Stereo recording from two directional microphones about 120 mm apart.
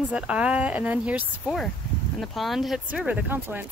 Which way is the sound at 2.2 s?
Centre (ahead or behind).